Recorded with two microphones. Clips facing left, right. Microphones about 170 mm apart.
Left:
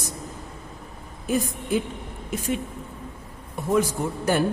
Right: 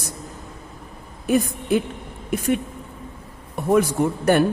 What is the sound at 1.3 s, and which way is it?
A man's voice, 65° right (ahead or behind).